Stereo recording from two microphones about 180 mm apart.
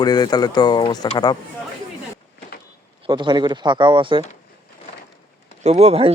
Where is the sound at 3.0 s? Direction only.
25° right (ahead or behind).